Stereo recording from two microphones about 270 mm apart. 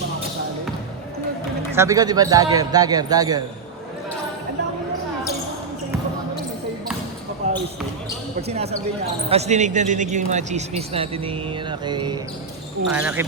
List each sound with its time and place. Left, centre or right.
1.7 s a man's voice: centre
7.4 s basketball bounce: right
8.4 s speech: right
12.9 s speech: centre